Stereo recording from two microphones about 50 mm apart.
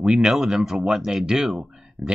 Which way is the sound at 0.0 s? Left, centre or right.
Centre.